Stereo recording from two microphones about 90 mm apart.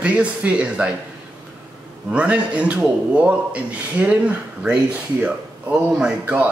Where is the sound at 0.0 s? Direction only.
15° right (ahead or behind).